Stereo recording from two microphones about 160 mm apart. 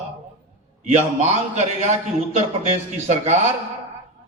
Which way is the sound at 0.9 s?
45° right (ahead or behind).